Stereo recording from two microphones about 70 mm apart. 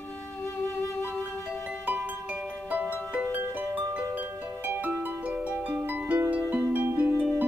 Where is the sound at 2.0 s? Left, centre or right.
Right.